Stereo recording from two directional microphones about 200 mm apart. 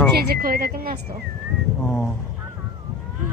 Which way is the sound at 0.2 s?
45° right (ahead or behind).